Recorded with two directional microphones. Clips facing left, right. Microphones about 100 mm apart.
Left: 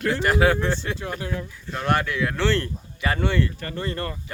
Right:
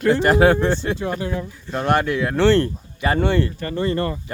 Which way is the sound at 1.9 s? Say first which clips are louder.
Right 4 dB; 25° right (ahead or behind).